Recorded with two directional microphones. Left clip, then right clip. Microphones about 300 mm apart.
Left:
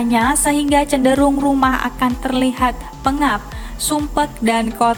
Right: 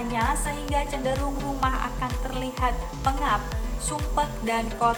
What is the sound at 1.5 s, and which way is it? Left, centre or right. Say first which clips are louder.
A woman's voice: left 10 dB; left.